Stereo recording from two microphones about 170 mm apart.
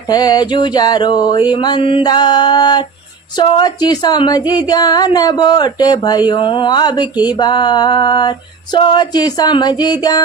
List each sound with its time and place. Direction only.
0.1 s speech: 25° left (ahead or behind)